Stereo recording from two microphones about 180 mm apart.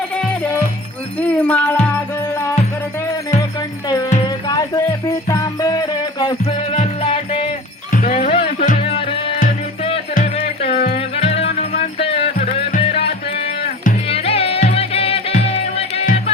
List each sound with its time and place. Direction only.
1.2 s music: 10° left (ahead or behind)
4.4 s music: 20° left (ahead or behind)
7.9 s jingle bell: 45° left (ahead or behind)
8.3 s music: 30° left (ahead or behind)
10.3 s music: 30° left (ahead or behind)